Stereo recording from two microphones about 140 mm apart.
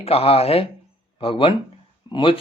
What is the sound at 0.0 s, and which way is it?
Speech, 45° left (ahead or behind).